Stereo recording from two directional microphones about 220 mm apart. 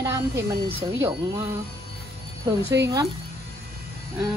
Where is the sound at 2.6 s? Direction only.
50° right (ahead or behind).